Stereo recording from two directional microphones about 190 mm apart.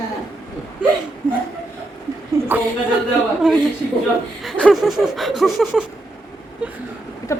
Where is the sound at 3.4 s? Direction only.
5° right (ahead or behind).